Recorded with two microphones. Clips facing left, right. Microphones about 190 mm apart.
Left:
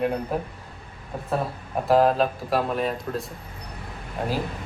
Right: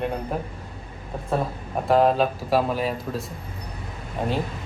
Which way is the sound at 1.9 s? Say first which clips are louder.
Even; centre (ahead or behind).